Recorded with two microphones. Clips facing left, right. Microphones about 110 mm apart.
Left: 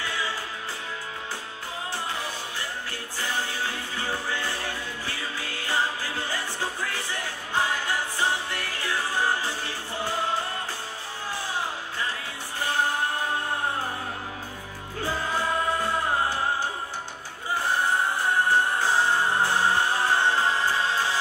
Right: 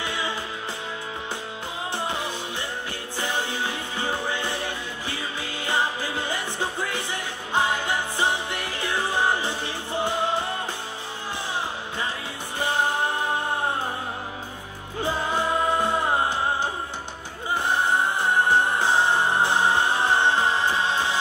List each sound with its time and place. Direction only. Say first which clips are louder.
0.0 s music: right 2 dB; 20° right (ahead or behind)
2.0 s music: right 5 dB; 20° right (ahead or behind)
12.5 s music: right 2 dB; 20° right (ahead or behind)
15.0 s music: right 3 dB; 20° right (ahead or behind)